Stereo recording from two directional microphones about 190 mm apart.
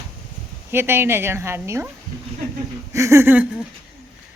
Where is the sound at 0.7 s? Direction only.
10° right (ahead or behind).